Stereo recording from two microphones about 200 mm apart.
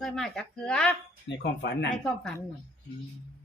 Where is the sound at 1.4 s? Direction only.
60° left (ahead or behind).